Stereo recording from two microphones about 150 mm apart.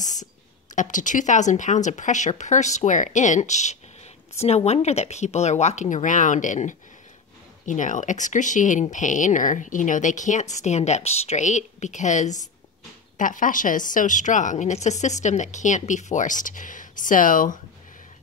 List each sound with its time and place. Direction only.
0.7 s a woman's voice: 55° left (ahead or behind)